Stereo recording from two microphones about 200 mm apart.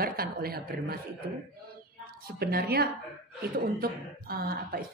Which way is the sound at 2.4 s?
50° right (ahead or behind).